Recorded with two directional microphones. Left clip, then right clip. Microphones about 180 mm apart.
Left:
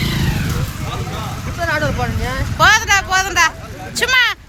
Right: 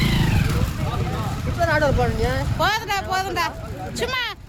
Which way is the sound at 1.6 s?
70° right (ahead or behind).